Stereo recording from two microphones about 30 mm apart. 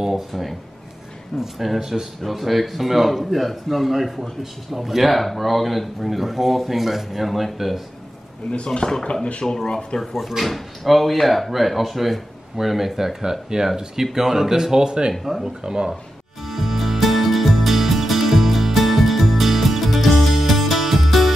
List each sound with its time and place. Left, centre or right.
0.3 s speech: centre
1.3 s speech: centre
1.8 s speech: centre
2.2 s speech: centre
8.6 s speech: left
9.7 s speech: left
10.1 s speech: centre; by 15.9 s right
16.4 s music: centre